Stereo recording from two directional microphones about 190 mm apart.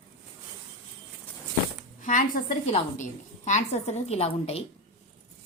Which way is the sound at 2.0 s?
40° left (ahead or behind).